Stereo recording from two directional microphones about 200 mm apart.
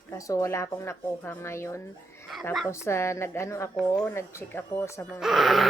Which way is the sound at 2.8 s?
15° left (ahead or behind).